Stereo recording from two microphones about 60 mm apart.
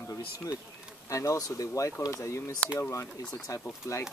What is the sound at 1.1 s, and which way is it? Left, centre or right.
Speech, left.